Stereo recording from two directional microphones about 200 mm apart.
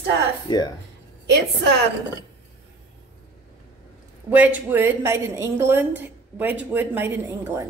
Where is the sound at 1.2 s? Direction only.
60° right (ahead or behind).